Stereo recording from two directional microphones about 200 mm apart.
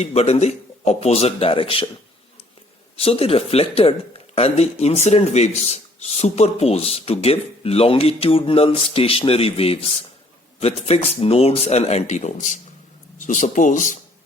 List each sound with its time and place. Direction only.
0.0 s speech: 30° left (ahead or behind)
2.9 s speech: 30° left (ahead or behind)